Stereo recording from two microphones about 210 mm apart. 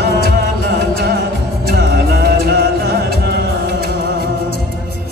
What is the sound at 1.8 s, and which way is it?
Music, 45° right (ahead or behind).